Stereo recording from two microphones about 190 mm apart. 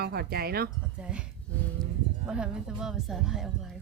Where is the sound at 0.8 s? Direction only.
5° right (ahead or behind).